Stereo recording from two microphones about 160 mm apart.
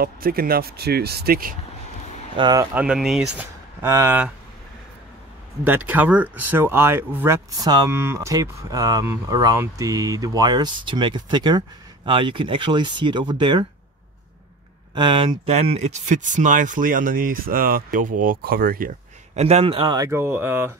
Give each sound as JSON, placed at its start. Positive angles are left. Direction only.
{"t": 0.0, "sound": "speech", "side_deg": -65}
{"t": 2.3, "sound": "speech", "side_deg": -25}
{"t": 2.7, "sound": "speech", "side_deg": -5}
{"t": 3.8, "sound": "speech", "side_deg": -15}
{"t": 5.6, "sound": "speech", "side_deg": -10}
{"t": 7.6, "sound": "speech", "side_deg": -25}
{"t": 15.0, "sound": "speech", "side_deg": -30}
{"t": 19.3, "sound": "a man's voice", "side_deg": -40}
{"t": 20.0, "sound": "speech", "side_deg": -15}